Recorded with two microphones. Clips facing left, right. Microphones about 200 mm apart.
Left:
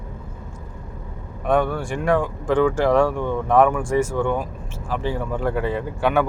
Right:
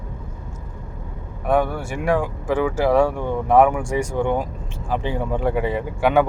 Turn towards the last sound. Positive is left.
turn(degrees=-15)  # may be behind; listen again after turning